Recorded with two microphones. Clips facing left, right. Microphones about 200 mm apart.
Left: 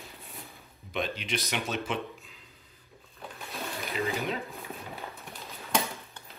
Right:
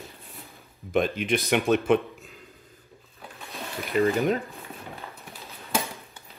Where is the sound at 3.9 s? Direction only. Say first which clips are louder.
Right 10 dB; 50° right (ahead or behind).